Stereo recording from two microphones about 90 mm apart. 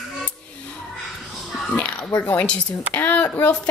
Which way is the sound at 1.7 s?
10° left (ahead or behind).